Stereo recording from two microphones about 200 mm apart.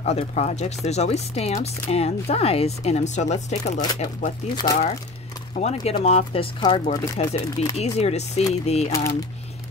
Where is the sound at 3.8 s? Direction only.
20° left (ahead or behind).